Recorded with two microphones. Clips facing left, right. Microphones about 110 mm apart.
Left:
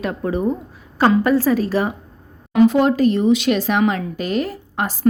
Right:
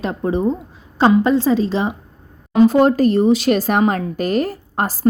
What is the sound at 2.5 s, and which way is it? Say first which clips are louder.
A woman's voice: right 2 dB; 35° right (ahead or behind).